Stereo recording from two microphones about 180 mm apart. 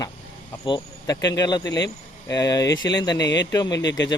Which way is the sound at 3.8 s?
85° left.